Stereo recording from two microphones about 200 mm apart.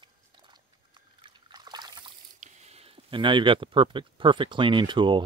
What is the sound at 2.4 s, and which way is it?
Speech, 35° right (ahead or behind).